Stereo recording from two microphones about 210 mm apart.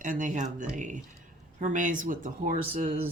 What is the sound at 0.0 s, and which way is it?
Speech, 40° right (ahead or behind).